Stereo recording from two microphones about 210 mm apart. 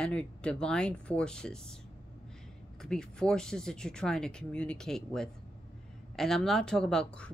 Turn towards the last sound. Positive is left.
turn(degrees=5)  # may be behind; listen again after turning